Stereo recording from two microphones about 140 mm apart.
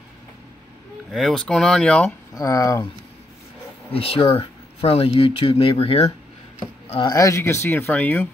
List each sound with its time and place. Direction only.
1.1 s speech: centre (ahead or behind)
2.3 s speech: 25° left (ahead or behind)
3.9 s speech: 45° left (ahead or behind)
7.1 s speech: 25° left (ahead or behind)